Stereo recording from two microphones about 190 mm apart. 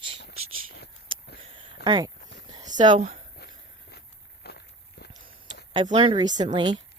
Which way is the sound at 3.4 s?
55° left (ahead or behind).